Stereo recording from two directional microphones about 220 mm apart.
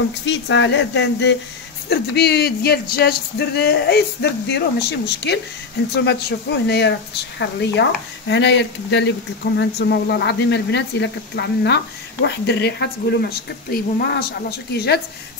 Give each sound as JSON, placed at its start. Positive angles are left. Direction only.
{"t": 0.3, "sound": "speech", "side_deg": 55}